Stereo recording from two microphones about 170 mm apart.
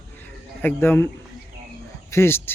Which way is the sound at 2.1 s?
15° left (ahead or behind).